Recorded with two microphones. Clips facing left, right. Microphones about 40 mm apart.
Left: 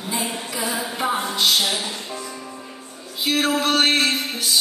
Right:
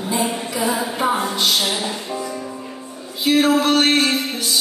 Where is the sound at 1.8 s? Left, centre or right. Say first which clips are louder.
Right 5 dB; centre.